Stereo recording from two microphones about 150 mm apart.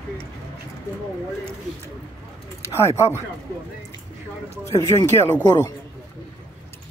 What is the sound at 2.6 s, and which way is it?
Speech, 15° left (ahead or behind).